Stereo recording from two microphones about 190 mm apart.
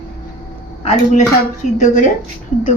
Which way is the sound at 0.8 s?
35° left (ahead or behind).